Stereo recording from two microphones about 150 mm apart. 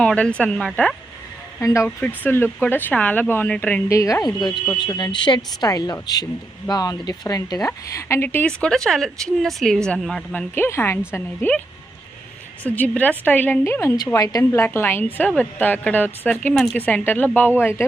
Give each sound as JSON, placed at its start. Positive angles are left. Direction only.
{"t": 0.0, "sound": "speech", "side_deg": 5}
{"t": 1.6, "sound": "speech", "side_deg": 20}
{"t": 10.3, "sound": "speech", "side_deg": 15}
{"t": 12.6, "sound": "speech", "side_deg": 10}